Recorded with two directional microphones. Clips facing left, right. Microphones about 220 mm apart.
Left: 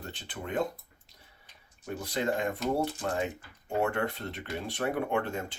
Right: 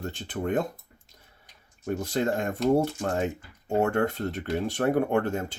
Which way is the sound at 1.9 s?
45° right (ahead or behind).